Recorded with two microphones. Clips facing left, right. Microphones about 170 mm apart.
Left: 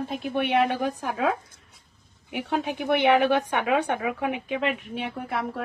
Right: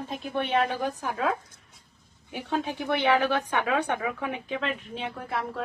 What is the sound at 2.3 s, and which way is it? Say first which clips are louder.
A woman's voice: left 2 dB; 15° left (ahead or behind).